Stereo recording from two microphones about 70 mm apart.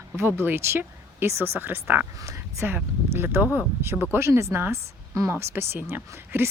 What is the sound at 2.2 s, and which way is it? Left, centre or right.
Speech, right.